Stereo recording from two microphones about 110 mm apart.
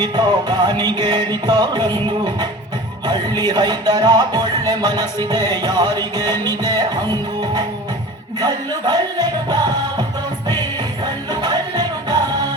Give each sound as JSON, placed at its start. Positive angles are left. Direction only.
{"t": 0.0, "sound": "music", "side_deg": -40}
{"t": 11.0, "sound": "music", "side_deg": -40}